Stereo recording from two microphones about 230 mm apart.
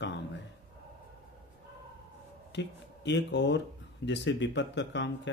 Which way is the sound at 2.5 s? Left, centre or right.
Left.